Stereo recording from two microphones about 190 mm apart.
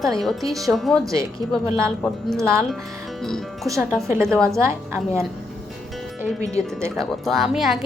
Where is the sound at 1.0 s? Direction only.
15° right (ahead or behind).